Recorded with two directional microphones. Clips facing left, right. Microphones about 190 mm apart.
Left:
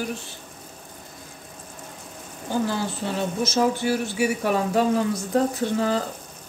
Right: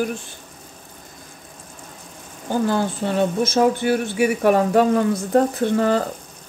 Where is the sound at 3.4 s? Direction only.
55° right (ahead or behind).